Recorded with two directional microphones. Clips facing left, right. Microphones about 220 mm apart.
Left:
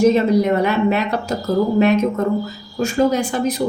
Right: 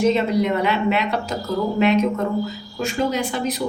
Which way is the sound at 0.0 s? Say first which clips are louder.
Left 4 dB; 45° left (ahead or behind).